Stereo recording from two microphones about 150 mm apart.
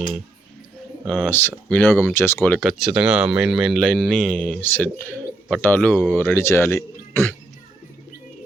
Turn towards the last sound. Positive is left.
turn(degrees=15)  # may be behind; listen again after turning